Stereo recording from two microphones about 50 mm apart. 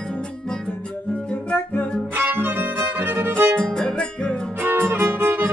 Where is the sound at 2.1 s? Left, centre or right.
Right.